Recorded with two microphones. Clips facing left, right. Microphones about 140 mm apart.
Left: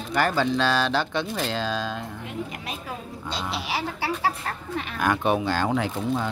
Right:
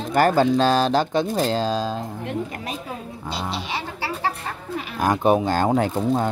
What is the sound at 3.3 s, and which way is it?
Speech, centre (ahead or behind).